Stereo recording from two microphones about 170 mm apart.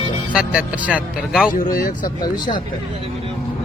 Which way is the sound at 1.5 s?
55° left (ahead or behind).